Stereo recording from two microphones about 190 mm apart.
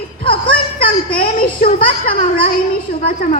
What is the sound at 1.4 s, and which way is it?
A woman's voice, 45° left (ahead or behind).